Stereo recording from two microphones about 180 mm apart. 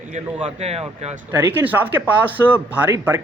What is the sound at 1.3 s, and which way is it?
Speech, 10° right (ahead or behind).